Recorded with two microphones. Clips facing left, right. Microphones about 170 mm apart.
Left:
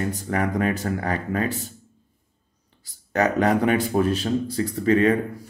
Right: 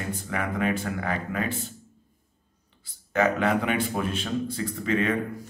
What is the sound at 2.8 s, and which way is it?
Speech, 40° left (ahead or behind).